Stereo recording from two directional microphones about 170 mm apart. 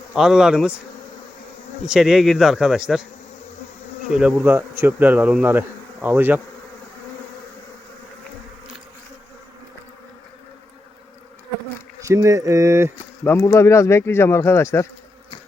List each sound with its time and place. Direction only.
0.1 s speech: 5° right (ahead or behind)
1.9 s speech: 5° right (ahead or behind)
4.1 s speech: 5° right (ahead or behind)
11.9 s speech: 15° right (ahead or behind)
13.2 s speech: 15° left (ahead or behind)